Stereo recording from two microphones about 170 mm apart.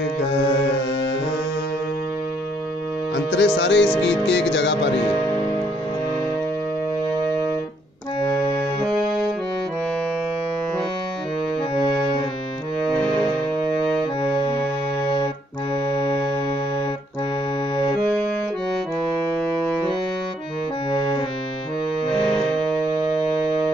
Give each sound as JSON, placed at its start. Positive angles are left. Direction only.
{"t": 3.3, "sound": "music", "side_deg": 90}